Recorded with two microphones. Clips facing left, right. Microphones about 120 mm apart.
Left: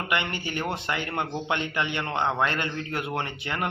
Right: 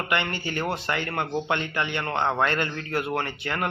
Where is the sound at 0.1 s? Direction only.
15° left (ahead or behind).